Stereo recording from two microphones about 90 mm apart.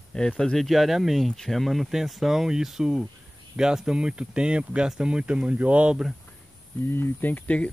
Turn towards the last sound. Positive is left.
turn(degrees=15)  # may be behind; listen again after turning